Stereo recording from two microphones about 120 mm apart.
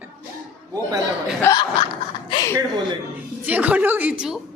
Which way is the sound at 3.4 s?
15° right (ahead or behind).